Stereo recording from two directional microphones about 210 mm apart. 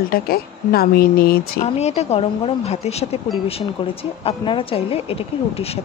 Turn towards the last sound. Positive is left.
turn(degrees=30)  # may be behind; listen again after turning